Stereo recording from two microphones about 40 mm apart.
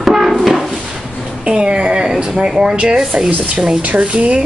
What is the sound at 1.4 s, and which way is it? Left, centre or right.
Speech, right.